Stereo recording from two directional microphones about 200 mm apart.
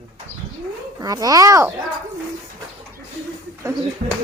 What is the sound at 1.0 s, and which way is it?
Speech, 20° right (ahead or behind).